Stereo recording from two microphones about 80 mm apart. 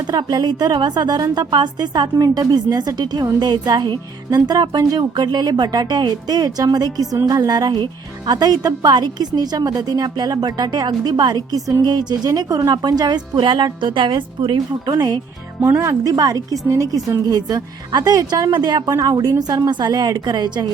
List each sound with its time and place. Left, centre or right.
0.1 s speech: right
2.1 s speech: right
14.9 s speech: right
15.6 s a woman's voice: right
18.5 s a woman's voice: right
18.9 s a woman's voice: right